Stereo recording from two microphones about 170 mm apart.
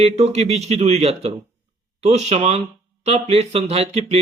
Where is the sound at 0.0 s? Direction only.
40° right (ahead or behind).